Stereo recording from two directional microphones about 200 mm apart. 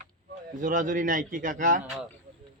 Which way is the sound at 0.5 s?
40° right (ahead or behind).